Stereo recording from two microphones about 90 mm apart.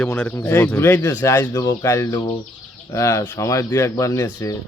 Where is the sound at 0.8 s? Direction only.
30° left (ahead or behind).